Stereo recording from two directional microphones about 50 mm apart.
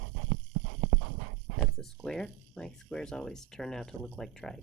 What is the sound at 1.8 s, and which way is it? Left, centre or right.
Speech, centre.